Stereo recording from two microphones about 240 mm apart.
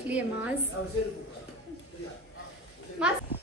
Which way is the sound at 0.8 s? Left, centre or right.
Left.